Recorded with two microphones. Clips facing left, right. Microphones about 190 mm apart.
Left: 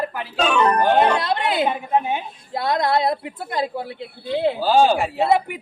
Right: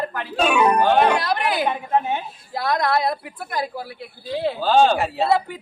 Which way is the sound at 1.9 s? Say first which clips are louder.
Even; 15° left (ahead or behind).